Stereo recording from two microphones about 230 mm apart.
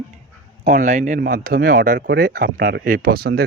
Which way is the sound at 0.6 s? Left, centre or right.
Right.